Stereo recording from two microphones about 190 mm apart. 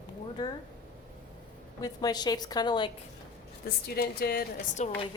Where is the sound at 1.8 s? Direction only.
20° left (ahead or behind).